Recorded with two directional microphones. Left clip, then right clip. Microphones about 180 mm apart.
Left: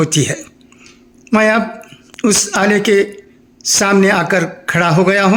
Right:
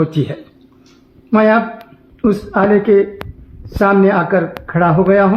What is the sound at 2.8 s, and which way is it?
Speech, 20° left (ahead or behind).